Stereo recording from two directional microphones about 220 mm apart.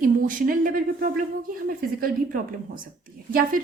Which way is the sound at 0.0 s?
40° right (ahead or behind).